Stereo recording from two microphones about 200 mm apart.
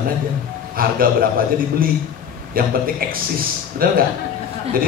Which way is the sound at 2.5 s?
45° right (ahead or behind).